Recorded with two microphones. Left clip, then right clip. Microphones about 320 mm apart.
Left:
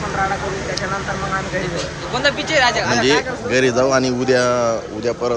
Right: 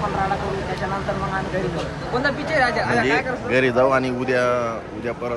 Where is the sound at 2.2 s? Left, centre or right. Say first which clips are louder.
Left 4 dB; left.